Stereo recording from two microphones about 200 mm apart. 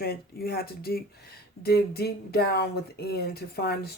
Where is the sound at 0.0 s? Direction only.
50° left (ahead or behind).